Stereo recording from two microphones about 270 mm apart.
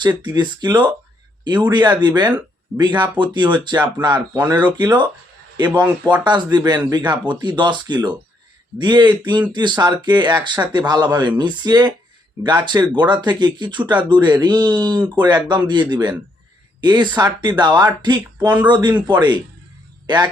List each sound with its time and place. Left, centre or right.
0.0 s speech: centre